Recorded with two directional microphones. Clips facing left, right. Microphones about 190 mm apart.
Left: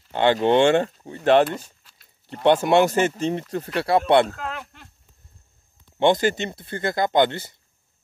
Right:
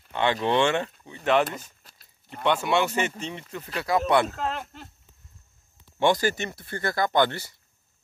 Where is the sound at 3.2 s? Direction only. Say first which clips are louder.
Left 10 dB; 45° left (ahead or behind).